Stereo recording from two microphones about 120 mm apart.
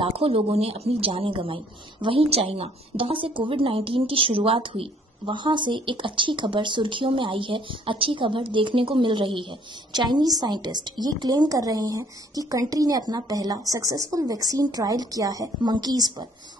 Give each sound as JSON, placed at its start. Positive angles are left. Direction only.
{"t": 0.0, "sound": "a woman's voice", "side_deg": -50}